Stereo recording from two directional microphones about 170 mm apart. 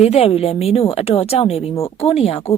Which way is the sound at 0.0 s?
35° left (ahead or behind).